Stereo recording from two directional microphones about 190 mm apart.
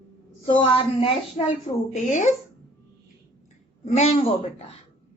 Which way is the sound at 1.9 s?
40° left (ahead or behind).